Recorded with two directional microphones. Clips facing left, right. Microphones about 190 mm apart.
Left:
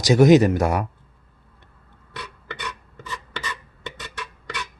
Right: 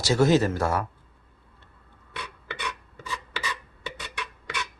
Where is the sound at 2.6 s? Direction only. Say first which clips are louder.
Even; 10° right (ahead or behind).